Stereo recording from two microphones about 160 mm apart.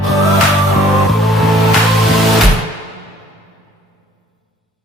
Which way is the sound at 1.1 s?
Centre (ahead or behind).